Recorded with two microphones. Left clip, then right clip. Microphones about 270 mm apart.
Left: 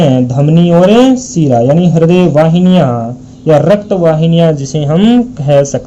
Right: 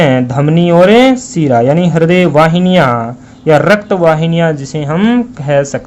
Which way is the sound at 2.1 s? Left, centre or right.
Right.